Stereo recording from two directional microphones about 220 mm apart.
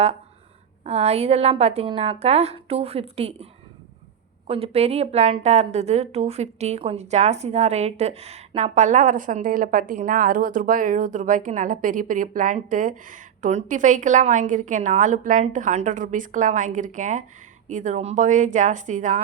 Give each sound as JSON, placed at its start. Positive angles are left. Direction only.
{"t": 0.9, "sound": "a woman's voice", "side_deg": -30}
{"t": 4.4, "sound": "a woman's voice", "side_deg": -25}